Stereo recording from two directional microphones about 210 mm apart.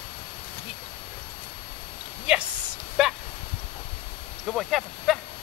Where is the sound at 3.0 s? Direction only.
Centre (ahead or behind).